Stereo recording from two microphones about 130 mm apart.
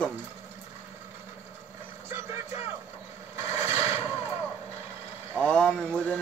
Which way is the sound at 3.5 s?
15° right (ahead or behind).